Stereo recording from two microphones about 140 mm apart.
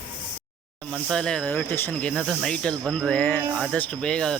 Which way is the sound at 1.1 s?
5° left (ahead or behind).